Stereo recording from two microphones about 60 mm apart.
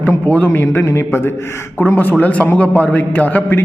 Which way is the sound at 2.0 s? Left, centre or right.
Left.